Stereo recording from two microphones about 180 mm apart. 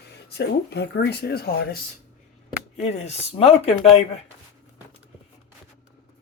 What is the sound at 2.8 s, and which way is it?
Speech, 35° left (ahead or behind).